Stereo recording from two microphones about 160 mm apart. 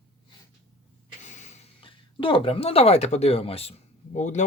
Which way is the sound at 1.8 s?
35° left (ahead or behind).